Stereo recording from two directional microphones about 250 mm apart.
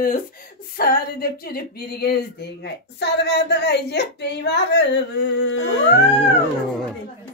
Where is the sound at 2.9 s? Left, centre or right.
Left.